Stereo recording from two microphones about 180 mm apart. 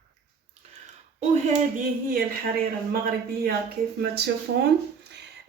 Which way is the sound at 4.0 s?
70° right (ahead or behind).